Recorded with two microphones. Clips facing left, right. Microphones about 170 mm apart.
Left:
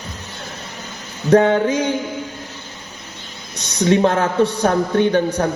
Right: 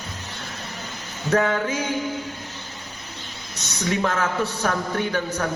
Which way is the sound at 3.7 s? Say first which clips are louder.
Left 9 dB; 30° left (ahead or behind).